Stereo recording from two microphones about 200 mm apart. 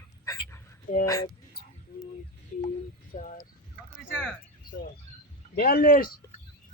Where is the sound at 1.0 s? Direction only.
15° left (ahead or behind).